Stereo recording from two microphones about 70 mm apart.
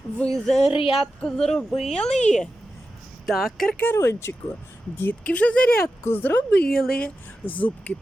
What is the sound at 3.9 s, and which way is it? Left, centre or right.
Speech, left.